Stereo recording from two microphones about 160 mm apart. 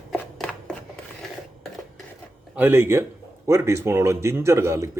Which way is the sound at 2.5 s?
10° right (ahead or behind).